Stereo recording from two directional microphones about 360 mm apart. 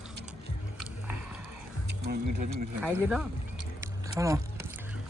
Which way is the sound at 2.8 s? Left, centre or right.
Centre.